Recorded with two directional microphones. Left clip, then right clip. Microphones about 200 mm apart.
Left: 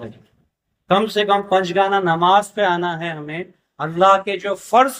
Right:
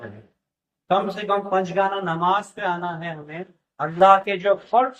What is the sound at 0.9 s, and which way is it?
Speech, 45° left (ahead or behind).